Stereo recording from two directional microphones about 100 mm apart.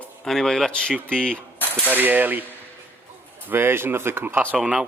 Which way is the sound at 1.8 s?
20° right (ahead or behind).